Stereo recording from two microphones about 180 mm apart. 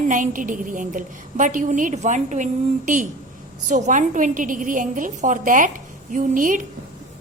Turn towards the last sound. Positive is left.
turn(degrees=-45)  # may be behind; listen again after turning